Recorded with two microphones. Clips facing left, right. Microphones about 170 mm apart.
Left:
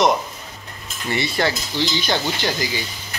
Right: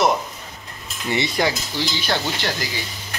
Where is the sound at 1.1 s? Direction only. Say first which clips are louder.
Even; 20° right (ahead or behind).